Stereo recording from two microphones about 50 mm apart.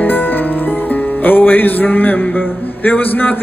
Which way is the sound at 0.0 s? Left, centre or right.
Left.